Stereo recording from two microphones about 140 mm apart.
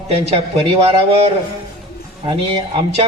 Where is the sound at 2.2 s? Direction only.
35° right (ahead or behind).